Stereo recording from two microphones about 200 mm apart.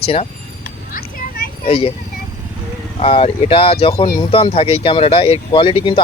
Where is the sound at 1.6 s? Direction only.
30° left (ahead or behind).